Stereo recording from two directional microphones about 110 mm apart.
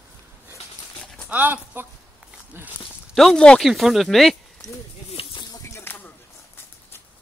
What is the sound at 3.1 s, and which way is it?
Speech, 5° left (ahead or behind).